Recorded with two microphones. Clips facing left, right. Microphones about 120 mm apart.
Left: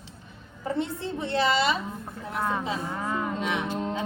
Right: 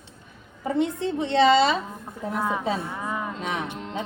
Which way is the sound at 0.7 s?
20° right (ahead or behind).